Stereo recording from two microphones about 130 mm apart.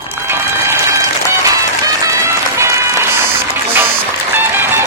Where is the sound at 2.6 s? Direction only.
20° right (ahead or behind).